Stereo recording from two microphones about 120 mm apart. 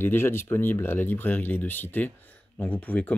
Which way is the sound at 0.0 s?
20° left (ahead or behind).